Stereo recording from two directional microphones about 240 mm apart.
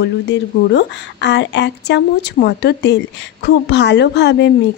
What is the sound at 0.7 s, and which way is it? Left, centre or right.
A woman's voice, left.